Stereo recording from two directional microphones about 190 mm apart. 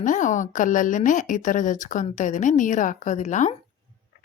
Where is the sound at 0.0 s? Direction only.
40° left (ahead or behind).